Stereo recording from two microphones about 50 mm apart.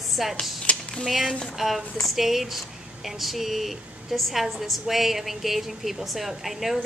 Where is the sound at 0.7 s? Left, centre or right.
Left.